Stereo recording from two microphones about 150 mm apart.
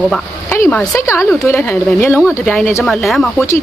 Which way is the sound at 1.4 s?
15° left (ahead or behind).